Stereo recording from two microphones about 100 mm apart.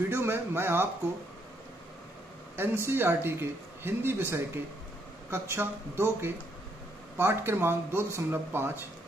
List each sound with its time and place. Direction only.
0.1 s speech: 25° right (ahead or behind)
2.5 s speech: 25° right (ahead or behind)